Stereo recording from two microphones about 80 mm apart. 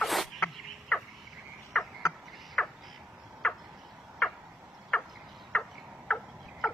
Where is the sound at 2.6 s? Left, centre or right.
Centre.